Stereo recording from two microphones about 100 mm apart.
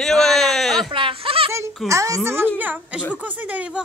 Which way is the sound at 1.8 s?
30° right (ahead or behind).